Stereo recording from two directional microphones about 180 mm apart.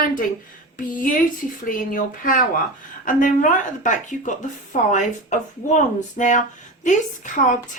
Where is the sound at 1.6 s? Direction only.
50° left (ahead or behind).